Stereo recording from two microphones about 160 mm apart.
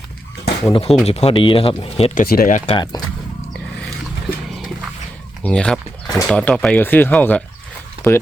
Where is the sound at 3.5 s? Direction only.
Centre (ahead or behind).